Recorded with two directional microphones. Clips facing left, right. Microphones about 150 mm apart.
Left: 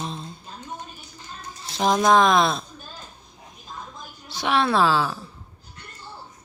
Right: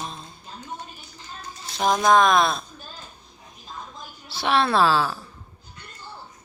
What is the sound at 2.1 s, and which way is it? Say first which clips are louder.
Speech: even; 25° left (ahead or behind).